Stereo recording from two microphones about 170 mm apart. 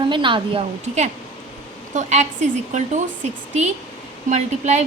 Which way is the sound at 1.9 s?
45° right (ahead or behind).